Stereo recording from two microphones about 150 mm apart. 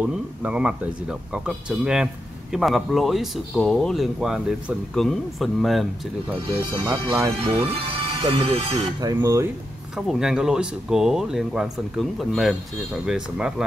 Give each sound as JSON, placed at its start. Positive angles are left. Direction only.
{"t": 0.0, "sound": "speech", "side_deg": -10}
{"t": 6.4, "sound": "speech", "side_deg": -35}
{"t": 9.0, "sound": "speech", "side_deg": -20}
{"t": 9.9, "sound": "speech", "side_deg": -5}